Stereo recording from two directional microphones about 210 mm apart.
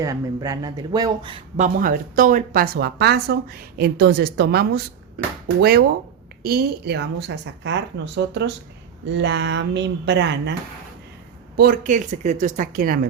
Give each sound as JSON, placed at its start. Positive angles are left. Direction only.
{"t": 0.0, "sound": "speech", "side_deg": -15}
{"t": 1.5, "sound": "a woman's voice", "side_deg": -40}
{"t": 11.5, "sound": "a woman's voice", "side_deg": -45}